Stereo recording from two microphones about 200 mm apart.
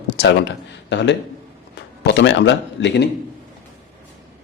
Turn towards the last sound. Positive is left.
turn(degrees=60)  # may be behind; listen again after turning